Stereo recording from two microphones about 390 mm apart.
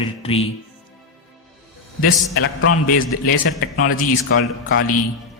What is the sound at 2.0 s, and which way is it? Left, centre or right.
Speech, left.